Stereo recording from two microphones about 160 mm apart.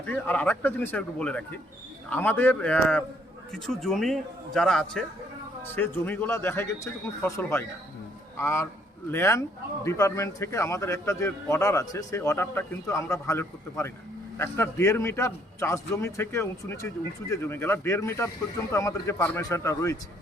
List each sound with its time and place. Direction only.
0.0 s a man's voice: 10° left (ahead or behind)